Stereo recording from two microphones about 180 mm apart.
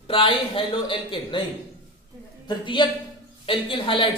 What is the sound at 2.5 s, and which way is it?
A man's voice, 25° left (ahead or behind).